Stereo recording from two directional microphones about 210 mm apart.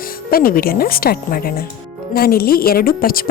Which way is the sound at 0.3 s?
45° left (ahead or behind).